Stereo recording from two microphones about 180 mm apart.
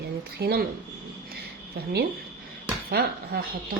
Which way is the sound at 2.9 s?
55° right (ahead or behind).